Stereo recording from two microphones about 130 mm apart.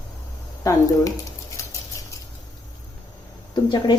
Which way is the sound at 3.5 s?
35° left (ahead or behind).